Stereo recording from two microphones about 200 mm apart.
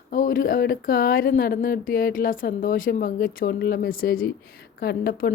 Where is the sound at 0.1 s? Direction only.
45° left (ahead or behind).